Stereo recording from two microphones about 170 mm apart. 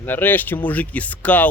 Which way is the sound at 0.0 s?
10° left (ahead or behind).